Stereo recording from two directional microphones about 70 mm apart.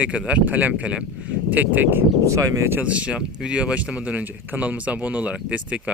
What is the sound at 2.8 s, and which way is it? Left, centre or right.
Speech, centre.